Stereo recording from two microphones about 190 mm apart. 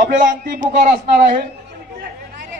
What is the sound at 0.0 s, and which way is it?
Speech, 45° right (ahead or behind).